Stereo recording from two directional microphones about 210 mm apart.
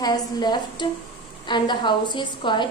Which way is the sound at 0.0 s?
20° left (ahead or behind).